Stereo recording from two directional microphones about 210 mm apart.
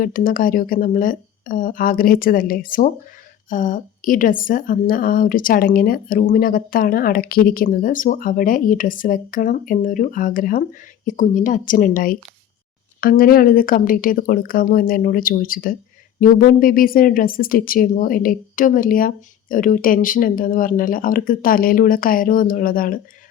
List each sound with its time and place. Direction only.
0.0 s a woman's voice: 40° left (ahead or behind)